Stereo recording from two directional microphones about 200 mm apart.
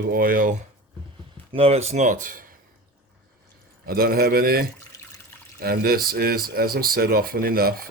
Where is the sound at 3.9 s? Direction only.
50° right (ahead or behind).